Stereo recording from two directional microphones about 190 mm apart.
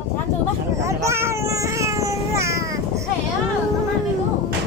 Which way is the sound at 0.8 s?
15° right (ahead or behind).